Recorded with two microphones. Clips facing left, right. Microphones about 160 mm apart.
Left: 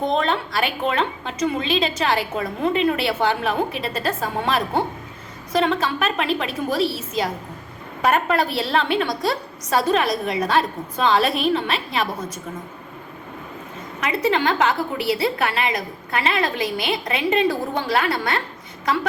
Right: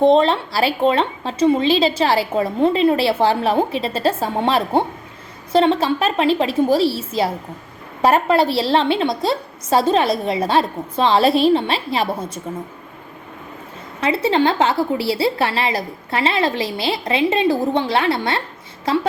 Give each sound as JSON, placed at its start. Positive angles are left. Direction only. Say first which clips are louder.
{"t": 0.0, "sound": "a woman's voice", "louder": "right 8 dB", "side_deg": -30}
{"t": 14.0, "sound": "a woman's voice", "louder": "right 4 dB", "side_deg": -30}